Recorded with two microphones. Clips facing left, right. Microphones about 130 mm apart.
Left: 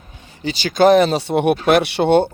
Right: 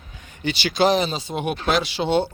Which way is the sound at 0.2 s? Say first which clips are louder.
Left 2 dB; 35° left (ahead or behind).